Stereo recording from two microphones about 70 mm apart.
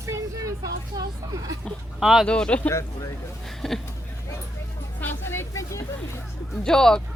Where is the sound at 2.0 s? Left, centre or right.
Centre.